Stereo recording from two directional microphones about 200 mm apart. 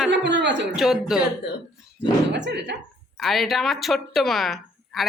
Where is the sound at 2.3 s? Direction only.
60° right (ahead or behind).